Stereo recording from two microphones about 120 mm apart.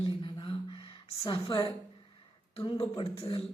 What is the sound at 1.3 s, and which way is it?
A man's voice, 45° left (ahead or behind).